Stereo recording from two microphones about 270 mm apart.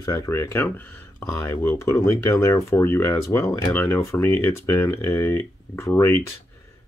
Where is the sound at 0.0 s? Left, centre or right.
Centre.